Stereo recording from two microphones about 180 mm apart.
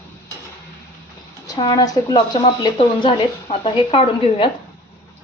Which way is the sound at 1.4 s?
25° left (ahead or behind).